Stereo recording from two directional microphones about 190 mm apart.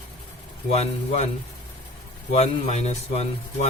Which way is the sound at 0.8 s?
35° left (ahead or behind).